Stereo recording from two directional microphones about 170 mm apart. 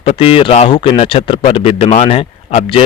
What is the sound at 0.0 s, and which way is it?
Speech, 35° left (ahead or behind).